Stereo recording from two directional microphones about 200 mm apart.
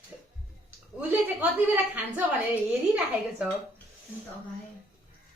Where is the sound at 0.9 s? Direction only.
5° right (ahead or behind).